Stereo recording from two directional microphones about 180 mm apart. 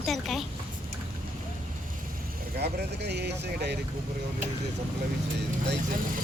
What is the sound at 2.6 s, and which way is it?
Speech, 65° right (ahead or behind).